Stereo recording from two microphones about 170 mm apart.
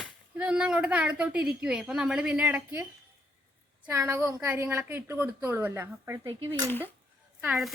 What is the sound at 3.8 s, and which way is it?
A woman's voice, 20° right (ahead or behind).